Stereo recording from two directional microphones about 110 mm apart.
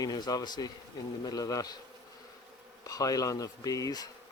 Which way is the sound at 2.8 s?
35° left (ahead or behind).